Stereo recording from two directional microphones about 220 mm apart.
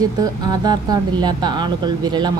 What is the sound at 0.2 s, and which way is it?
A woman's voice, 15° right (ahead or behind).